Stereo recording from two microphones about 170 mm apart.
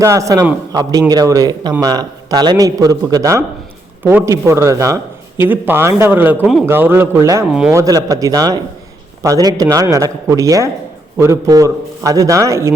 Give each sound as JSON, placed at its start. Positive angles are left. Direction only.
{"t": 0.0, "sound": "a man's voice", "side_deg": -20}